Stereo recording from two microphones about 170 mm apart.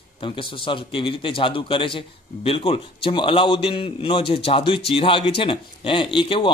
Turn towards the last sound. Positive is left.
turn(degrees=30)  # may be behind; listen again after turning